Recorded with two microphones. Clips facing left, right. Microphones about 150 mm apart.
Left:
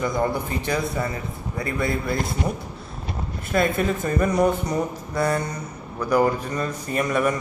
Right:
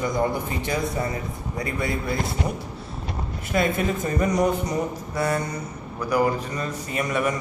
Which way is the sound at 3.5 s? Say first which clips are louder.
Left 1 dB; 15° right (ahead or behind).